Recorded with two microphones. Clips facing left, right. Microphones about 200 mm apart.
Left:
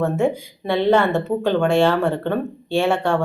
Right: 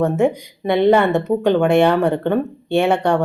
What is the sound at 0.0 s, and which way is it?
Speech, 15° right (ahead or behind).